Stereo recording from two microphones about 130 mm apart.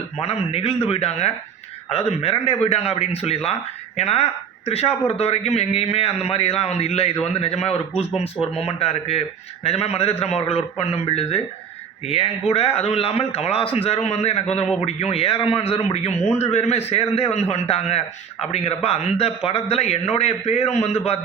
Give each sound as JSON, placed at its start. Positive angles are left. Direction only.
{"t": 0.2, "sound": "a man's voice", "side_deg": 50}